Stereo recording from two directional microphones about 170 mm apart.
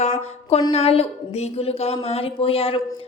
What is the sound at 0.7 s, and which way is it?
A woman's voice, 35° left (ahead or behind).